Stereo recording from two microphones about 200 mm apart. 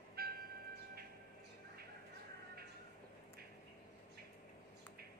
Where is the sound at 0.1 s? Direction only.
50° right (ahead or behind).